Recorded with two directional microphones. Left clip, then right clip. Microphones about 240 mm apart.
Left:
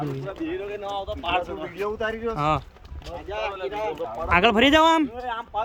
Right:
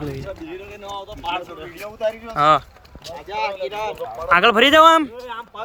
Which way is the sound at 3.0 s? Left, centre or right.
Right.